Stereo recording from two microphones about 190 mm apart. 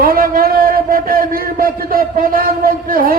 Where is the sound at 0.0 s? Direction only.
50° right (ahead or behind).